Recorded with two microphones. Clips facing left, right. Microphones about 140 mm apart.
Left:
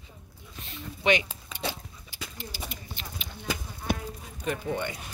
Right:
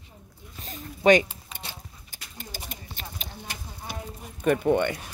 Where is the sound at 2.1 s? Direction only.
45° right (ahead or behind).